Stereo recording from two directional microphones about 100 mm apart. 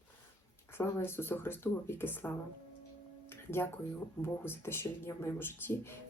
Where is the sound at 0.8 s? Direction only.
25° left (ahead or behind).